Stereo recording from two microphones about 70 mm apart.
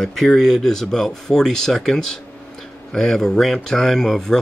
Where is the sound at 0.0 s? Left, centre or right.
Centre.